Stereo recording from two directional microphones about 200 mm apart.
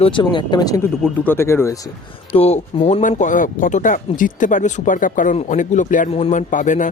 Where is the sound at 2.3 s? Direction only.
30° left (ahead or behind).